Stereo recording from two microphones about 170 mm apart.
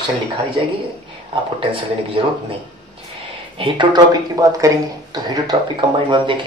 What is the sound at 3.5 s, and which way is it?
Speech, 30° right (ahead or behind).